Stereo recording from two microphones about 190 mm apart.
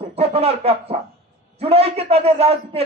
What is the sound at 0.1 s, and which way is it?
A man's voice, 30° right (ahead or behind).